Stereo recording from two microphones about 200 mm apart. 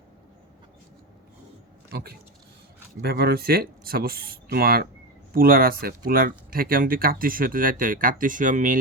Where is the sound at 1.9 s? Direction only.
50° right (ahead or behind).